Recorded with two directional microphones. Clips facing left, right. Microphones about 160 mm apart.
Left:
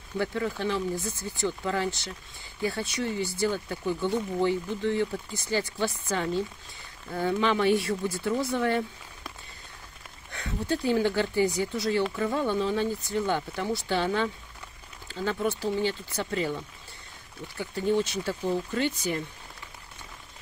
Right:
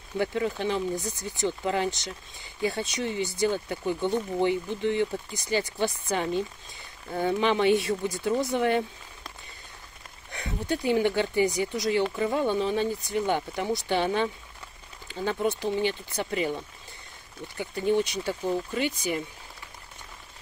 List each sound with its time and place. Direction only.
0.2 s speech: 20° right (ahead or behind)
10.3 s speech: 15° right (ahead or behind)